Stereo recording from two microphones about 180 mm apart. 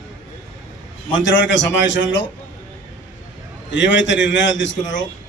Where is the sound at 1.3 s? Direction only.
90° left.